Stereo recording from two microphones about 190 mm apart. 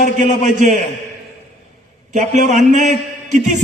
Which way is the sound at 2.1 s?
40° right (ahead or behind).